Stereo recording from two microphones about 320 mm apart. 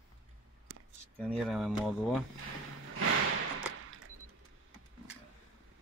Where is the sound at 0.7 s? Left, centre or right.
Right.